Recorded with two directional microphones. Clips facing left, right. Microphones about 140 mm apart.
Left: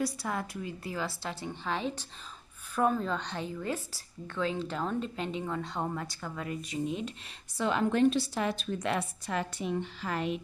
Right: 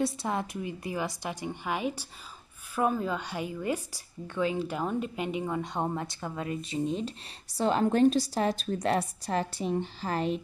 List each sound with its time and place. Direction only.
0.0 s a woman's voice: 20° right (ahead or behind)